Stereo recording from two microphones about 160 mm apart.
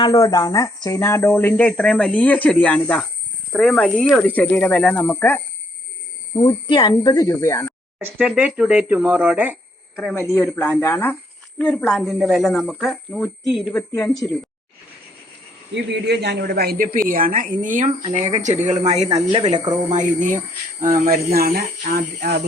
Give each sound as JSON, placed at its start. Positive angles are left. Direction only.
{"t": 0.0, "sound": "speech", "side_deg": 20}
{"t": 6.3, "sound": "speech", "side_deg": 30}
{"t": 7.9, "sound": "speech", "side_deg": -5}
{"t": 9.9, "sound": "speech", "side_deg": 5}
{"t": 15.7, "sound": "a man's voice", "side_deg": -90}
{"t": 21.3, "sound": "a man's voice", "side_deg": -70}